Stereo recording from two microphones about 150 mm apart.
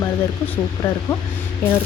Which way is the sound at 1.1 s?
20° left (ahead or behind).